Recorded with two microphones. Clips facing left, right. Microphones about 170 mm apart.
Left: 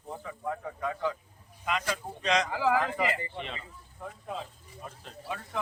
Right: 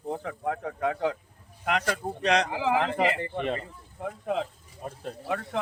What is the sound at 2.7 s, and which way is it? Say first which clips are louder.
Speech: right 3 dB; 65° right (ahead or behind).